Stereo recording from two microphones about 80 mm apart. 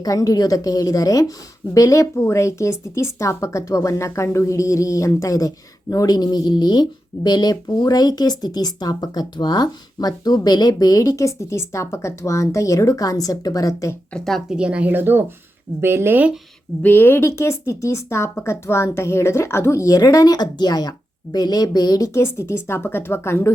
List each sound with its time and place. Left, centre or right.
0.0 s speech: left
14.1 s speech: centre
14.5 s speech: centre; by 16.2 s right
16.8 s speech: left
22.1 s speech: left